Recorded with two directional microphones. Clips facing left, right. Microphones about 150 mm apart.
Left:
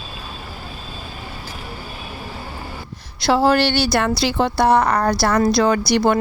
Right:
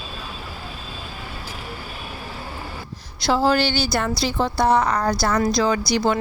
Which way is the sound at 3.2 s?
65° left (ahead or behind).